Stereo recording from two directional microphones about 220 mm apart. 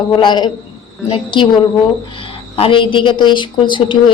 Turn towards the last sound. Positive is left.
turn(degrees=20)  # may be behind; listen again after turning